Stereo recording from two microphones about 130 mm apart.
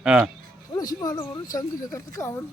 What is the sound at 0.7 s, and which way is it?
Speech, 30° left (ahead or behind).